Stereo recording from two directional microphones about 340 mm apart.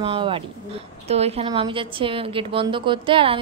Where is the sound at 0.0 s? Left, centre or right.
Centre.